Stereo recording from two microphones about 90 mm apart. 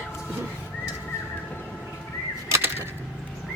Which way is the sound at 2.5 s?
25° right (ahead or behind).